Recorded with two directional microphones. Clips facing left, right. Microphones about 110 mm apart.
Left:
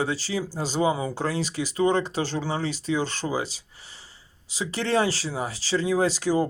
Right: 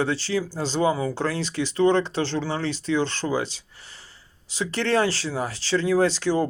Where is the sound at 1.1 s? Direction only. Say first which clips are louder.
Right 1 dB; 5° left (ahead or behind).